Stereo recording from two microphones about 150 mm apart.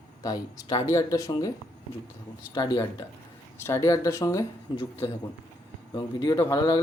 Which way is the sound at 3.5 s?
15° left (ahead or behind).